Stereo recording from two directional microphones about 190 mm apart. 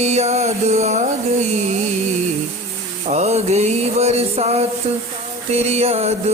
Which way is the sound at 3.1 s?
35° right (ahead or behind).